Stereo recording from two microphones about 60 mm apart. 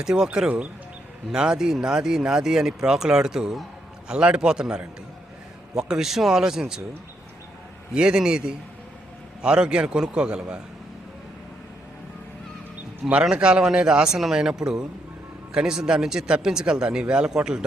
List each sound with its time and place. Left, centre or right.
0.0 s speech: centre
7.9 s speech: centre
13.2 s speech: centre